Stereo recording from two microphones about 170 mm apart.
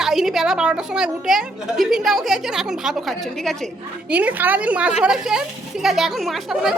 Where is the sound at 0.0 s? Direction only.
Centre (ahead or behind).